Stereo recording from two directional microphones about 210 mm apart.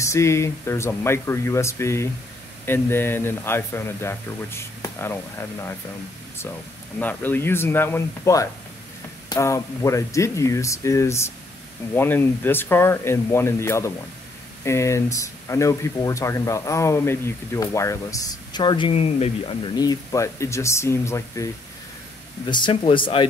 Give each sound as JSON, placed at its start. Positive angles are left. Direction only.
{"t": 0.0, "sound": "speech", "side_deg": 15}
{"t": 7.0, "sound": "speech", "side_deg": 10}
{"t": 22.5, "sound": "speech", "side_deg": 20}